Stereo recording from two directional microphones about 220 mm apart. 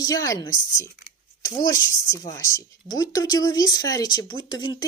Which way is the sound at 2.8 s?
15° left (ahead or behind).